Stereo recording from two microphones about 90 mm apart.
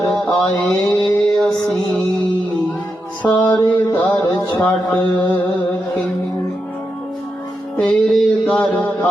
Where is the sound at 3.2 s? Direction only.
15° left (ahead or behind).